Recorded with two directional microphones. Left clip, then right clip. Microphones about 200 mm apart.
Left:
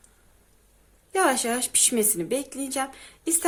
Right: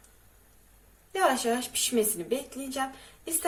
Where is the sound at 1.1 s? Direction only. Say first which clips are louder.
Left 2 dB; 45° left (ahead or behind).